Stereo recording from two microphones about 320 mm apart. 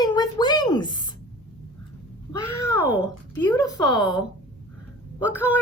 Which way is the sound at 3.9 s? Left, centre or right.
Centre.